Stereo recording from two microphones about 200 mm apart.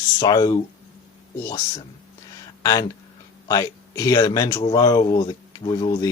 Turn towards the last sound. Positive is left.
turn(degrees=20)  # may be behind; listen again after turning